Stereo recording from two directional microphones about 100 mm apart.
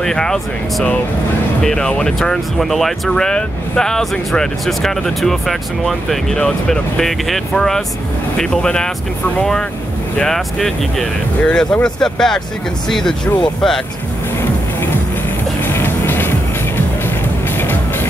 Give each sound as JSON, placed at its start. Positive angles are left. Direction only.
{"t": 0.0, "sound": "speech", "side_deg": 5}
{"t": 15.6, "sound": "music", "side_deg": 20}